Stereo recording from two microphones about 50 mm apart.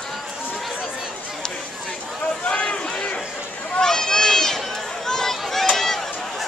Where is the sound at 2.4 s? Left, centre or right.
Left; by 5.7 s centre.